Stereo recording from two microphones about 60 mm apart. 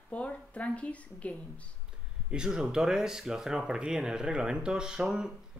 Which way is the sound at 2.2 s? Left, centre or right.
Centre.